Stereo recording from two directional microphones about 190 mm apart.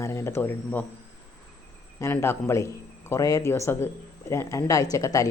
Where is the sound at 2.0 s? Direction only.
10° left (ahead or behind).